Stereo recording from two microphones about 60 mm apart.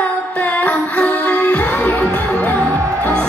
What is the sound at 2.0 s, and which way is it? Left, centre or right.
Music, left.